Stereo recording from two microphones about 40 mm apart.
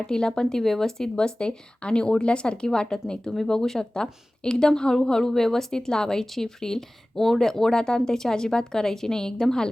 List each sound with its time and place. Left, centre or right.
0.1 s a woman's voice: centre
1.1 s a woman's voice: left
3.2 s speech: centre